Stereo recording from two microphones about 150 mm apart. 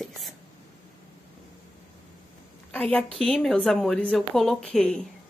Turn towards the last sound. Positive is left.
turn(degrees=5)  # may be behind; listen again after turning